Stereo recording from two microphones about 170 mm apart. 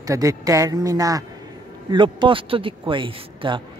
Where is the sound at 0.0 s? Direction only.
20° right (ahead or behind).